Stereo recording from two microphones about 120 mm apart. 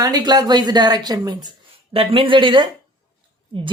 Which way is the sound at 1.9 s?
55° right (ahead or behind).